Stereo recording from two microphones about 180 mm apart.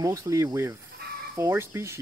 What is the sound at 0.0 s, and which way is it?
Speech, 15° right (ahead or behind).